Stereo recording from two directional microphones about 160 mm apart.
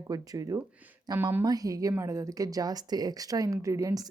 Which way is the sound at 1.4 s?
20° right (ahead or behind).